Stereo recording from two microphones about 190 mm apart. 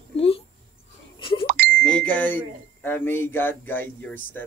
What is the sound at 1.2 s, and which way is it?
Bicycle bell, 25° left (ahead or behind).